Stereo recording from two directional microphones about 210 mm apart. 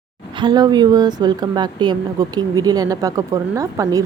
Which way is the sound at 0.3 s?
20° right (ahead or behind).